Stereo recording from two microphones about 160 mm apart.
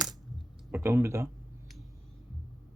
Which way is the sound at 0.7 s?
15° right (ahead or behind).